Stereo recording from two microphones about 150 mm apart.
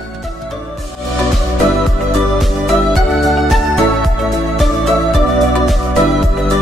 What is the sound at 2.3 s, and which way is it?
Music, centre (ahead or behind).